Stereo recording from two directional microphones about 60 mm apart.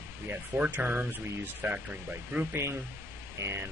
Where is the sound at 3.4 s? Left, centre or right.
Right.